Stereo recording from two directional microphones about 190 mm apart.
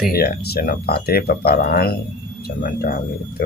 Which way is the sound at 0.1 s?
55° left (ahead or behind).